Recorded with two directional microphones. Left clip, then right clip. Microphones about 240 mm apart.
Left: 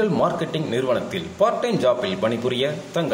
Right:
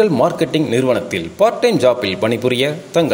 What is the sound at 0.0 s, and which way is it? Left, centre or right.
A man's voice, right.